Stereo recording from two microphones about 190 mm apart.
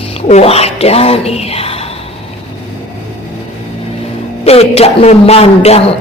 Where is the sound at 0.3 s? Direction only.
35° left (ahead or behind).